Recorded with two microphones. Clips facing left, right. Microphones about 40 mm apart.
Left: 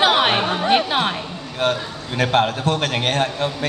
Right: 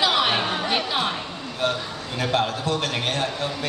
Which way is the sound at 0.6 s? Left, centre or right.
Left.